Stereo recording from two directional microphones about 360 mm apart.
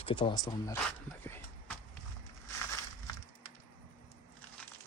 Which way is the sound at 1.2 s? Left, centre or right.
Centre.